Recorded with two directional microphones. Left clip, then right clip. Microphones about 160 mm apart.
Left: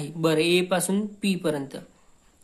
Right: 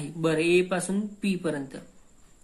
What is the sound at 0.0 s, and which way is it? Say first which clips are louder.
Speech: left 3 dB; 30° left (ahead or behind).